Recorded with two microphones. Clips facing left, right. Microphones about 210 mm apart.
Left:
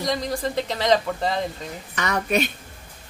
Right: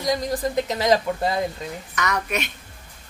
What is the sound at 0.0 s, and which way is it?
A man's voice, centre (ahead or behind).